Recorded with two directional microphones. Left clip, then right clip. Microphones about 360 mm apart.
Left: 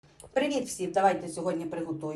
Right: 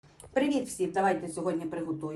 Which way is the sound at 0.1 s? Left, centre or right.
Centre.